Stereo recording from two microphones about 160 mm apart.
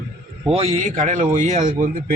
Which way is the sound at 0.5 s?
40° right (ahead or behind).